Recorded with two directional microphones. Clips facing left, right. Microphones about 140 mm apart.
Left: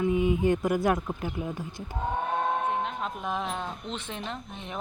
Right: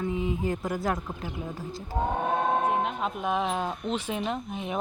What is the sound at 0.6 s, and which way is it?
Speech, 20° left (ahead or behind).